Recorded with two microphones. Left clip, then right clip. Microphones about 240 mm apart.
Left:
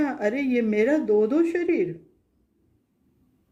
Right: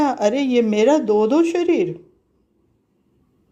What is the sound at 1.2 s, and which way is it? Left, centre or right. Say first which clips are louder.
Speech: right 5 dB; right.